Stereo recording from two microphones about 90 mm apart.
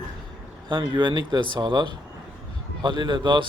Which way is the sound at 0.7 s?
60° right (ahead or behind).